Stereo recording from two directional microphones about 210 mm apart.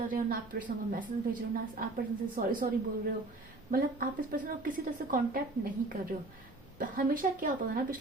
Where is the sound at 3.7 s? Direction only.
40° right (ahead or behind).